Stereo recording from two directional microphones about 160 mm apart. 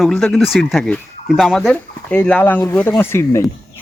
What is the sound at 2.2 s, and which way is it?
Speech, 10° left (ahead or behind).